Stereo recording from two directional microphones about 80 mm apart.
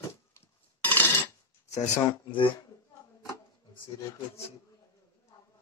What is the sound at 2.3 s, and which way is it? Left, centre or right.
Speech, left.